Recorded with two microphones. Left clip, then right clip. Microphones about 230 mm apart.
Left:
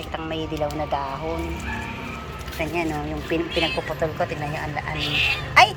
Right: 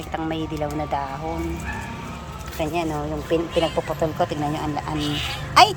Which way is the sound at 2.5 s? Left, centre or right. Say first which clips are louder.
Right 1 dB; centre.